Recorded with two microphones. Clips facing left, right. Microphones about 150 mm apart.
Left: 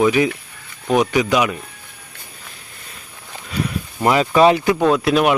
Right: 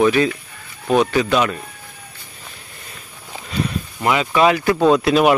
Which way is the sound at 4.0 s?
35° left (ahead or behind).